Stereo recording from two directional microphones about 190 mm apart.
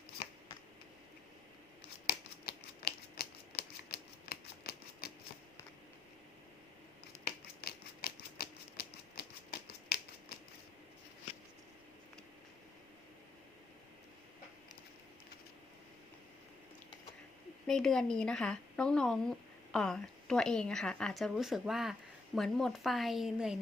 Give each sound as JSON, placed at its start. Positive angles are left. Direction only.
{"t": 2.0, "sound": "typewriter", "side_deg": 55}
{"t": 7.3, "sound": "typewriter", "side_deg": 55}
{"t": 17.7, "sound": "speech", "side_deg": 0}